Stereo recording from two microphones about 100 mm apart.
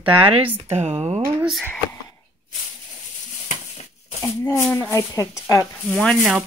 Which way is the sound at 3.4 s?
90° left.